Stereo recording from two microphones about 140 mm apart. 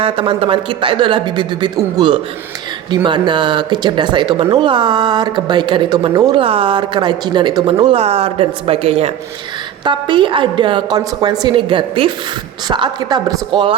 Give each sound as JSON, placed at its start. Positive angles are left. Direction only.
{"t": 0.0, "sound": "speech", "side_deg": -40}